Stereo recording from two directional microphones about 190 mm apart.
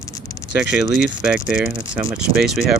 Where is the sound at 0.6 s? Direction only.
5° right (ahead or behind).